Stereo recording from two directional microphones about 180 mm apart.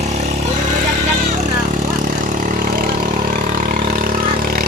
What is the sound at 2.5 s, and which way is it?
Vehicle, 50° right (ahead or behind).